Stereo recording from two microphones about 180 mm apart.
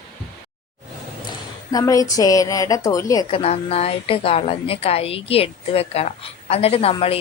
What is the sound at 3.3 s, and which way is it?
A woman's voice, 35° left (ahead or behind).